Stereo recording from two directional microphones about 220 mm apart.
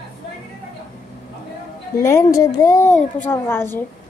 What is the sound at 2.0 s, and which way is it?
Speech, 15° left (ahead or behind).